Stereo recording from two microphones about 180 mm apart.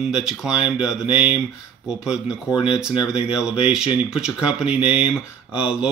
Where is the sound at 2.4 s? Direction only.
30° left (ahead or behind).